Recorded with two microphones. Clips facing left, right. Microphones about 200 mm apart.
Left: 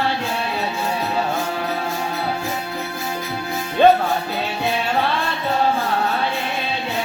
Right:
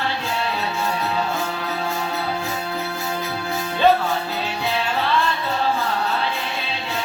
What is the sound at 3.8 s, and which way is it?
Music, 55° left (ahead or behind).